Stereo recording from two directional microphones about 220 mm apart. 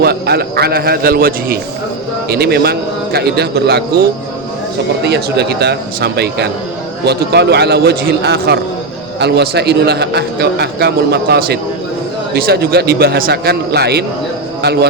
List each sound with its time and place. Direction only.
0.0 s a man's voice: 45° right (ahead or behind)
5.0 s a man's voice: 50° right (ahead or behind)